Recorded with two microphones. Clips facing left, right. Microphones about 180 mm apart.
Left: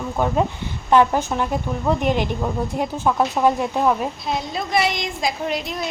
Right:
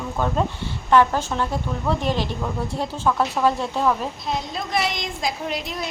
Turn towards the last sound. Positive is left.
turn(degrees=0)  # may be behind; listen again after turning